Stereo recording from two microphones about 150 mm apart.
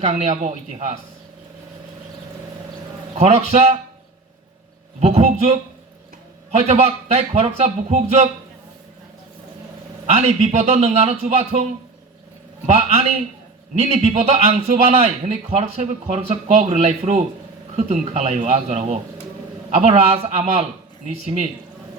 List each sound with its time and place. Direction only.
0.0 s a man's voice: 50° right (ahead or behind)
3.2 s a man's voice: 45° right (ahead or behind)
4.9 s a man's voice: 50° right (ahead or behind)
6.6 s a man's voice: 45° right (ahead or behind)
10.1 s a man's voice: 45° right (ahead or behind)
13.8 s a man's voice: 45° right (ahead or behind)